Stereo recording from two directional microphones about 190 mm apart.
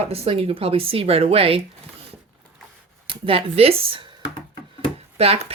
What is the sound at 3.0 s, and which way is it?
Speech, 30° right (ahead or behind).